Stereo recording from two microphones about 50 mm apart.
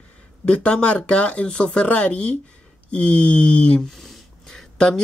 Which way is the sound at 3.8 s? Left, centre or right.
Centre.